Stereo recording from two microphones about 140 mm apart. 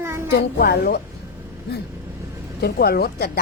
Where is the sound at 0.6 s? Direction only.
90° left.